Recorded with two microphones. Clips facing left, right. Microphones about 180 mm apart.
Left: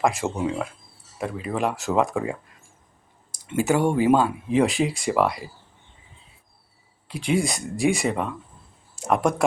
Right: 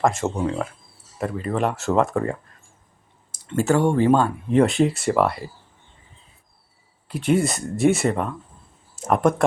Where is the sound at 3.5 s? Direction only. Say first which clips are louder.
Right 2 dB; 10° left (ahead or behind).